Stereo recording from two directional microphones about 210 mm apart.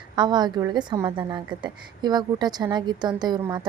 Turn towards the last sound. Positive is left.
turn(degrees=-20)  # may be behind; listen again after turning